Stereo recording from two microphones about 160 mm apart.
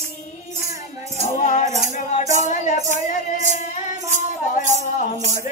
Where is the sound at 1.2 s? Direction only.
50° left (ahead or behind).